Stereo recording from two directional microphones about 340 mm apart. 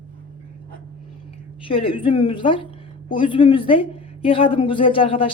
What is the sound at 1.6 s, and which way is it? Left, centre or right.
A woman's voice, centre.